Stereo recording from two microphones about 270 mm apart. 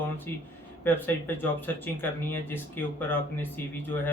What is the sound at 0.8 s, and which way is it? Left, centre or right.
Speech, centre.